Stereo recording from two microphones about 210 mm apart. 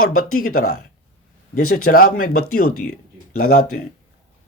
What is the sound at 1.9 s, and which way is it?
Speech, 45° left (ahead or behind).